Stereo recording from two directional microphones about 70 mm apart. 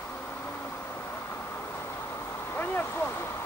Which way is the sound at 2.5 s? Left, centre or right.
Left.